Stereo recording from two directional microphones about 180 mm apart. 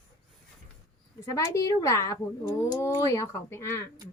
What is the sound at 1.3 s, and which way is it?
Speech, 15° left (ahead or behind).